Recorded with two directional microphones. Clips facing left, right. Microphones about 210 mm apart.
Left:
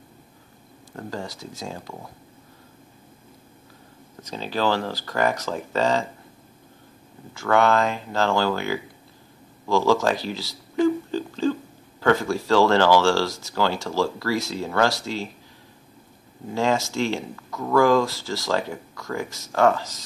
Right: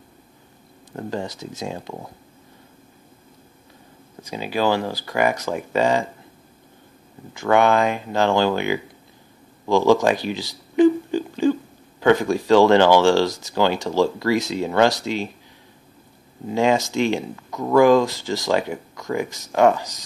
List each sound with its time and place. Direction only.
0.9 s speech: 20° right (ahead or behind)
4.2 s speech: 10° right (ahead or behind)
7.3 s speech: 15° right (ahead or behind)
9.7 s a sound: 20° right (ahead or behind)
12.0 s speech: 15° right (ahead or behind)
16.5 s speech: 15° right (ahead or behind)